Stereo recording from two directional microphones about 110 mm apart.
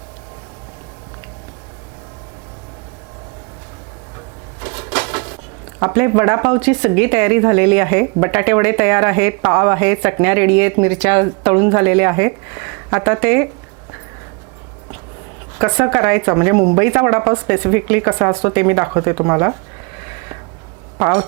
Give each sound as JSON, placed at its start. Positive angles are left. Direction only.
{"t": 4.6, "sound": "a sound", "side_deg": -20}
{"t": 5.8, "sound": "speech", "side_deg": -25}
{"t": 15.5, "sound": "speech", "side_deg": -25}
{"t": 20.0, "sound": "snort", "side_deg": -25}
{"t": 21.0, "sound": "speech", "side_deg": -30}